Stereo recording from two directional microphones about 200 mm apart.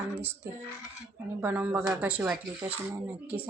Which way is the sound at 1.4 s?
5° right (ahead or behind).